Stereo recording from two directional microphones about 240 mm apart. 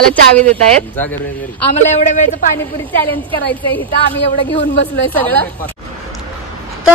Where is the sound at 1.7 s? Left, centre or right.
Left.